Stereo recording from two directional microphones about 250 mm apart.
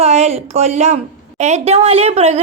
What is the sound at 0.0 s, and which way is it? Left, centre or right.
Speech, right.